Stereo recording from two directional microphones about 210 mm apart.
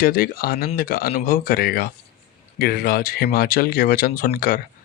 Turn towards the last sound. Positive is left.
turn(degrees=40)  # may be behind; listen again after turning